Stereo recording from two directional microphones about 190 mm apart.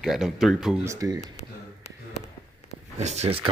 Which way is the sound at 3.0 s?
35° right (ahead or behind).